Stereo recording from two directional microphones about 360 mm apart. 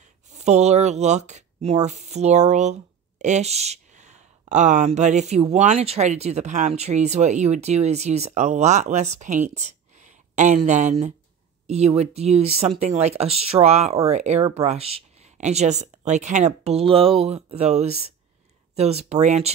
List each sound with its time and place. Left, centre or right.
0.3 s speech: centre